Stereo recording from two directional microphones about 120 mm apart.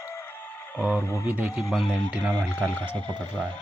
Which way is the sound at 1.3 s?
5° right (ahead or behind).